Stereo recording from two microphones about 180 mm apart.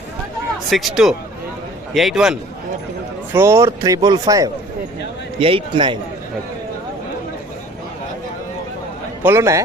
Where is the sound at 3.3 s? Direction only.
15° right (ahead or behind).